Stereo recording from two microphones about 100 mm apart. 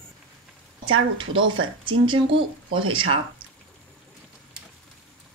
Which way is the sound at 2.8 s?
55° right (ahead or behind).